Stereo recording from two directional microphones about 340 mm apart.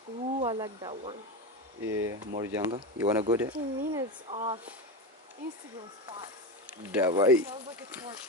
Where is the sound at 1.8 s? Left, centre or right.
Right.